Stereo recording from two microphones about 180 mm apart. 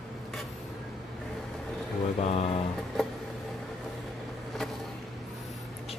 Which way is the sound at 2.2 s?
35° left (ahead or behind).